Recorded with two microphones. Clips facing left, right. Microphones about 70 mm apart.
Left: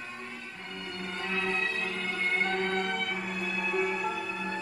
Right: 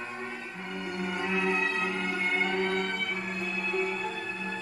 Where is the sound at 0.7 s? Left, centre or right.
Centre.